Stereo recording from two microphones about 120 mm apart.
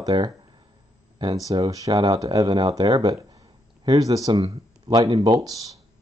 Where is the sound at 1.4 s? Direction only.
30° right (ahead or behind).